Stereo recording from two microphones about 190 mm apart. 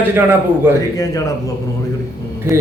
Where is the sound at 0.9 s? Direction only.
20° left (ahead or behind).